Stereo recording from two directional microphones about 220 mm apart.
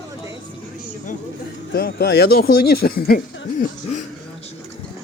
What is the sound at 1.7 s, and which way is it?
Speech, 45° left (ahead or behind).